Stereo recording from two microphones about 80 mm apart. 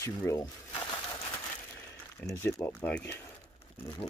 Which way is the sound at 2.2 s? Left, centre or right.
Left.